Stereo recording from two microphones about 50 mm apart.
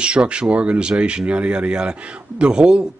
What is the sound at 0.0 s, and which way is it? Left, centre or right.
Speech, right.